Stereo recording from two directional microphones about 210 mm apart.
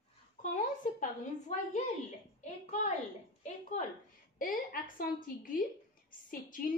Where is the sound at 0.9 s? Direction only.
35° left (ahead or behind).